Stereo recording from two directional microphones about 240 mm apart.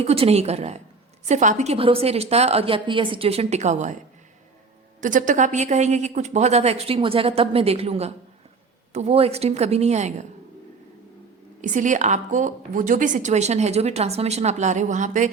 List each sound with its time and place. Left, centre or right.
0.0 s a woman's voice: right
4.9 s a woman's voice: right
11.6 s a woman's voice: right